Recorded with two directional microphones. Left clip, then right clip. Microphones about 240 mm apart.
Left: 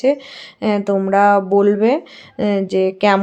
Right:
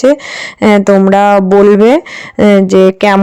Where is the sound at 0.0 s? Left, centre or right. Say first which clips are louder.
Right 8 dB; right.